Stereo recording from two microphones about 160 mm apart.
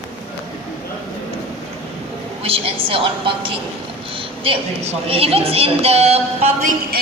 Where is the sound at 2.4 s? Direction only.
35° right (ahead or behind).